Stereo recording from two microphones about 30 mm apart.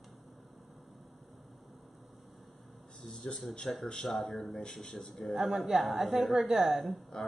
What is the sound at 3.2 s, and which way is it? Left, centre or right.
Mantra, centre.